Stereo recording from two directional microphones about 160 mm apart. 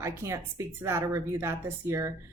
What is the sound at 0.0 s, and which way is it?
A woman's voice, 15° right (ahead or behind).